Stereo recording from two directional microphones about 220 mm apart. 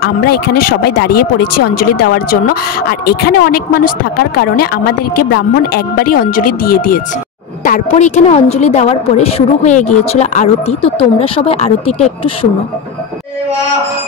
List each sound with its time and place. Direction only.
0.0 s a woman's voice: 45° left (ahead or behind); by 12.1 s 30° left (ahead or behind)